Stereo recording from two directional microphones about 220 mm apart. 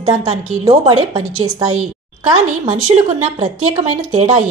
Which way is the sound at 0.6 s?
25° right (ahead or behind).